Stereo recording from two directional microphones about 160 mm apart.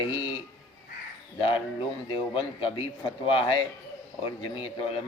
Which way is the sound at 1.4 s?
30° left (ahead or behind).